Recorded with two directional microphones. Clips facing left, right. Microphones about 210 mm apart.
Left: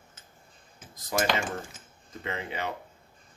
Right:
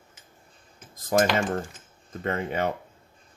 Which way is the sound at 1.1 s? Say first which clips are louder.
Right 6 dB; 45° right (ahead or behind).